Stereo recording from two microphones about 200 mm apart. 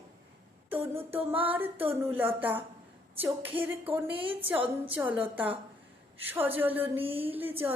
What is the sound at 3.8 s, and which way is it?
Speech, 25° right (ahead or behind).